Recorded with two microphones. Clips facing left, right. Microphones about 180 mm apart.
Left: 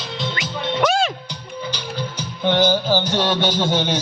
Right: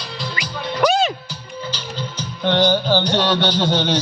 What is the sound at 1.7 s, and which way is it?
Music, 10° left (ahead or behind).